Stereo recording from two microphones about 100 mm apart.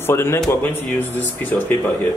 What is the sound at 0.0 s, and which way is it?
Speech, 25° left (ahead or behind).